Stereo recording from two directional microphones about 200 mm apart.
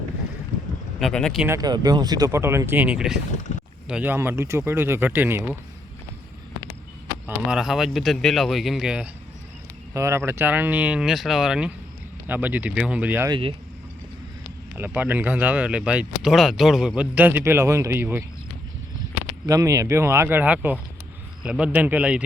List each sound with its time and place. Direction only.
0.9 s speech: centre (ahead or behind)
1.5 s speech: 20° right (ahead or behind)
3.5 s a sound: 35° left (ahead or behind)
3.8 s speech: 5° right (ahead or behind)
7.3 s speech: 5° right (ahead or behind)
9.9 s speech: 15° right (ahead or behind)
13.3 s speech: 25° right (ahead or behind)
14.8 s speech: 10° right (ahead or behind)
19.5 s speech: 15° right (ahead or behind)